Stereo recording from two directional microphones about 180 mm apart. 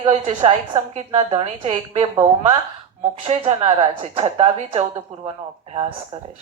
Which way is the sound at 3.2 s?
35° right (ahead or behind).